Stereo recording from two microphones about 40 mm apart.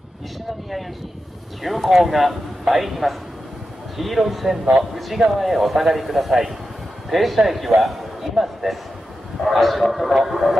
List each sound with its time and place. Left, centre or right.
1.6 s a man's voice: centre